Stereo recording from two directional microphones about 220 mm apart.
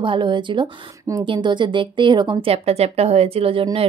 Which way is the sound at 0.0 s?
20° right (ahead or behind).